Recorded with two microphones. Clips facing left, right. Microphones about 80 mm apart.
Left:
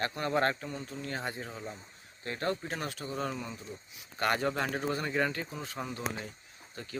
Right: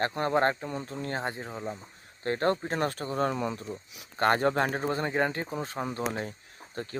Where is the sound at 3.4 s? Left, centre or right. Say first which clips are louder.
Right 9 dB; right.